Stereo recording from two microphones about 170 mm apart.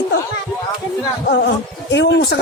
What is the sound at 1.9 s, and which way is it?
Speech, 85° left.